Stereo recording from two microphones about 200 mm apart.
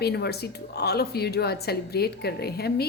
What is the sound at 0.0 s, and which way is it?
A woman's voice, 55° left (ahead or behind).